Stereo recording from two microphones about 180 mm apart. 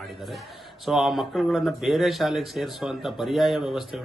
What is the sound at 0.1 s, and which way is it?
A man's voice, centre (ahead or behind).